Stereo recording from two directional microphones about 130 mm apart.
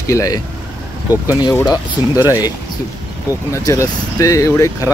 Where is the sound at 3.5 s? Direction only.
25° left (ahead or behind).